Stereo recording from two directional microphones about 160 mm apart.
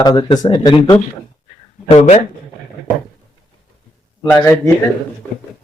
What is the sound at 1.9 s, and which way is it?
Speech, 45° left (ahead or behind).